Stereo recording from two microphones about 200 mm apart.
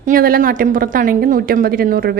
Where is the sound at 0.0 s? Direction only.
45° right (ahead or behind).